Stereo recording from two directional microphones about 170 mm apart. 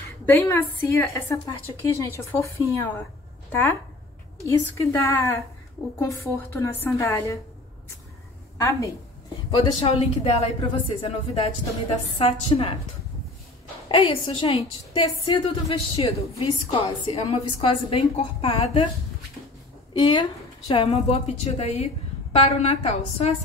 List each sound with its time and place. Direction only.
0.3 s a woman's voice: 10° left (ahead or behind)
4.5 s a woman's voice: 15° left (ahead or behind)
8.5 s a woman's voice: 20° left (ahead or behind)
9.6 s a woman's voice: 30° left (ahead or behind)
13.8 s a woman's voice: 30° left (ahead or behind)
19.9 s a woman's voice: 25° left (ahead or behind)